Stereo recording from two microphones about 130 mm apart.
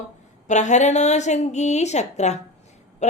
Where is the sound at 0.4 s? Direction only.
65° left (ahead or behind).